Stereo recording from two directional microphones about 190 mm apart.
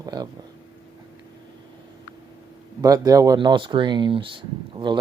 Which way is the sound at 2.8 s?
20° right (ahead or behind).